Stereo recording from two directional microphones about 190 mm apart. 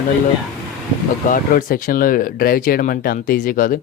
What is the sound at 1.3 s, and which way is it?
Speech, 45° left (ahead or behind).